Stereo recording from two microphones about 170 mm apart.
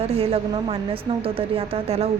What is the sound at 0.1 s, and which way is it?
Speech, 35° right (ahead or behind).